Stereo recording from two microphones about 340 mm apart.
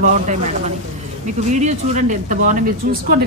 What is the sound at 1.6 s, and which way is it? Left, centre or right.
Speech, right.